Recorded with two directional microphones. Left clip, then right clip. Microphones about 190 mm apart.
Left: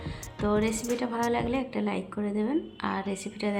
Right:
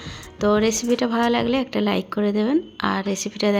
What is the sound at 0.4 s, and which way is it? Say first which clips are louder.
A woman's voice: right 9 dB; 30° right (ahead or behind).